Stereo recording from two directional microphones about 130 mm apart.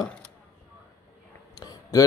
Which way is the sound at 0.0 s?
5° left (ahead or behind).